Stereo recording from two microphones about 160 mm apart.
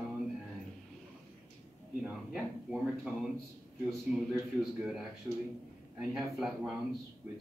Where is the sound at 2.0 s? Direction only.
5° right (ahead or behind).